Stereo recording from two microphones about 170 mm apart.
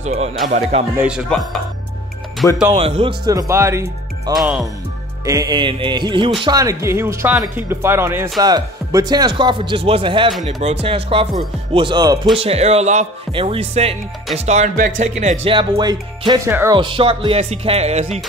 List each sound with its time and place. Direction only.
0.0 s speech: 40° right (ahead or behind)
0.9 s speech: 5° right (ahead or behind)
2.7 s speech: 30° right (ahead or behind)
3.3 s speech: 20° right (ahead or behind)
4.4 s speech: centre (ahead or behind)
5.2 s speech: 20° right (ahead or behind)
12.4 s speech: 35° right (ahead or behind); by 16.7 s 15° right (ahead or behind)
16.7 s speech: 30° right (ahead or behind)